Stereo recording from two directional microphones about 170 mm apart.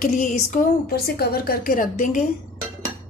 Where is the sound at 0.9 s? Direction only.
65° left (ahead or behind); by 2.2 s 50° left (ahead or behind).